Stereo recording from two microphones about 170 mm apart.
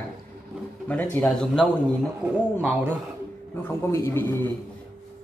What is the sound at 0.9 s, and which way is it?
Speech, 10° left (ahead or behind).